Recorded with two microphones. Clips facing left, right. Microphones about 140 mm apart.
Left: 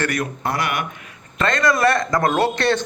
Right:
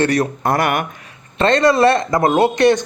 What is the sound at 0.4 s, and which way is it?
Speech, 50° right (ahead or behind).